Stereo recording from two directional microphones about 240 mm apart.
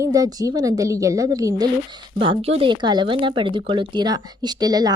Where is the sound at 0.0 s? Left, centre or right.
Centre.